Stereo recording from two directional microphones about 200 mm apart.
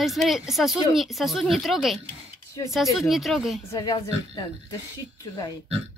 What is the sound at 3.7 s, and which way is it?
Speech, 20° left (ahead or behind).